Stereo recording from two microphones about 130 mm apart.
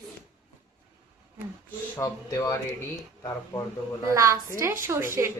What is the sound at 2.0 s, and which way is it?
Speech, 25° left (ahead or behind).